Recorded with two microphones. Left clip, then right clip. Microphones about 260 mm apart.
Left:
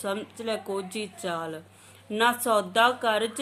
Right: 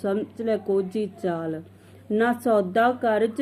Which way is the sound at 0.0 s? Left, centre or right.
Centre.